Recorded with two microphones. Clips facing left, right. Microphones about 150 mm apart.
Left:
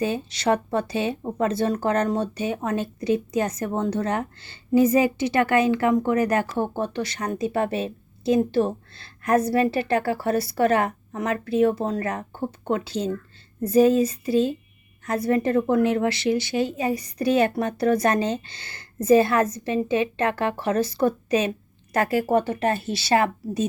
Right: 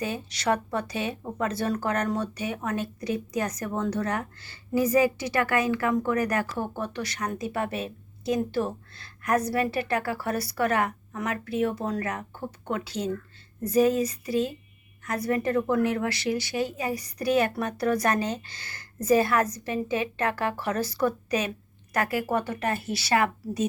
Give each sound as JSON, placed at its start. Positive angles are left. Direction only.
{"t": 0.0, "sound": "speech", "side_deg": 25}